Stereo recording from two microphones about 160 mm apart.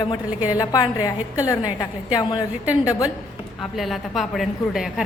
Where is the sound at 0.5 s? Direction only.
25° left (ahead or behind).